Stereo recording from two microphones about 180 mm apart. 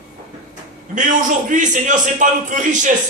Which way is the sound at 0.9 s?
45° right (ahead or behind).